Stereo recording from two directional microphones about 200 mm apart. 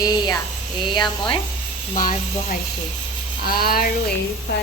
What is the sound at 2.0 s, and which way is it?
Speech, 40° left (ahead or behind).